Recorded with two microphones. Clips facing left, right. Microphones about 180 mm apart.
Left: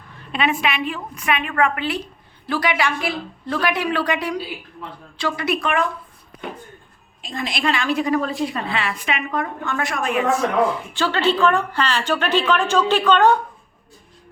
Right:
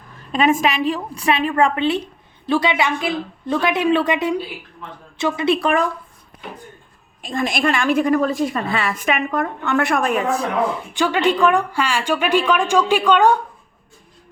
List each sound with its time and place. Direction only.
0.3 s a woman's voice: 40° right (ahead or behind); by 5.5 s 25° right (ahead or behind)
5.5 s a woman's voice: 35° right (ahead or behind)
7.2 s a woman's voice: 50° right (ahead or behind)
9.6 s a woman's voice: 65° right (ahead or behind); by 10.2 s 45° right (ahead or behind)
10.9 s a woman's voice: 15° right (ahead or behind)